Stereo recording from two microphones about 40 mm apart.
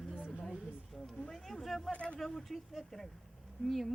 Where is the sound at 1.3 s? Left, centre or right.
Centre.